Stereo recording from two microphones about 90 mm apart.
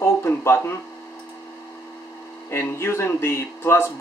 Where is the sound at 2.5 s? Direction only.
30° left (ahead or behind).